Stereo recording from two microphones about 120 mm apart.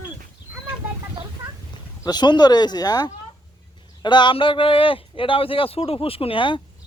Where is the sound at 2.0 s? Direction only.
35° left (ahead or behind).